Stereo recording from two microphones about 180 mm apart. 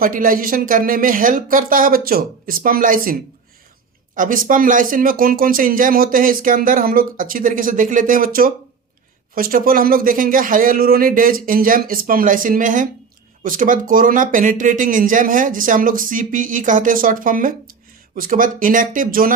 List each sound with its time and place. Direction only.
0.0 s speech: 50° right (ahead or behind)